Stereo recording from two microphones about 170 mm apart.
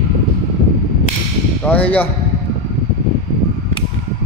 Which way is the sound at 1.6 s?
10° left (ahead or behind).